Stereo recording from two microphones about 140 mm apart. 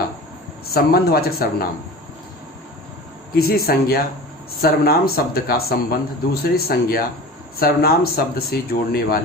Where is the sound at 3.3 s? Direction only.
90° left.